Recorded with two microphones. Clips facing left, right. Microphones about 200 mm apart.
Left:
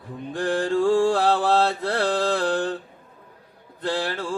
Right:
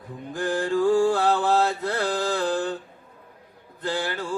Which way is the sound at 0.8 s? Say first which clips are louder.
Even; 30° left (ahead or behind).